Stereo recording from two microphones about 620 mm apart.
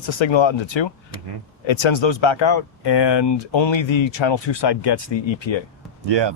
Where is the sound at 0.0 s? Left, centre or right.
Left.